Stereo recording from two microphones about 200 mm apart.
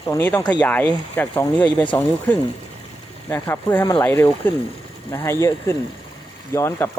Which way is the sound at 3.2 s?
10° left (ahead or behind).